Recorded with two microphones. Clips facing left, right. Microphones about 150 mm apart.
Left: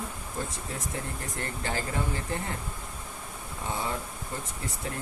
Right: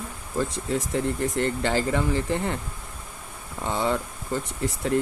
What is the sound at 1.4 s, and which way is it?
Speech, 80° right.